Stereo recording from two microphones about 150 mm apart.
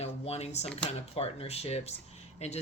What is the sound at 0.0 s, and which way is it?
Speech, 45° left (ahead or behind).